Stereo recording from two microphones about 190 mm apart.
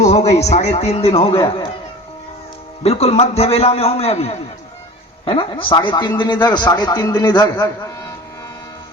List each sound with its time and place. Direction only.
0.0 s a man's voice: 35° left (ahead or behind)
2.8 s a man's voice: 30° left (ahead or behind)